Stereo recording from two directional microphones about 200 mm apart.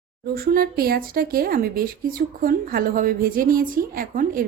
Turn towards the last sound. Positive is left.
turn(degrees=-45)  # may be behind; listen again after turning